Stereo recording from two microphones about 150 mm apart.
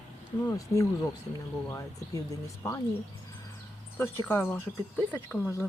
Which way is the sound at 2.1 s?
25° left (ahead or behind).